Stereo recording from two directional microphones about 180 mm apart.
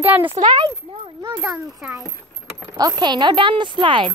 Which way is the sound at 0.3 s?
25° right (ahead or behind).